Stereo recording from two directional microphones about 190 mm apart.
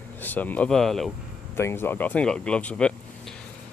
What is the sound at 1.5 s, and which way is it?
Speech, 10° left (ahead or behind).